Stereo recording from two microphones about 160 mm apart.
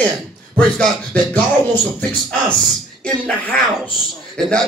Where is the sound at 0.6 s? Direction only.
5° left (ahead or behind).